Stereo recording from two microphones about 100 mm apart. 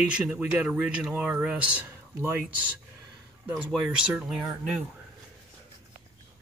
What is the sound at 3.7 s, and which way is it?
Speech, 5° right (ahead or behind).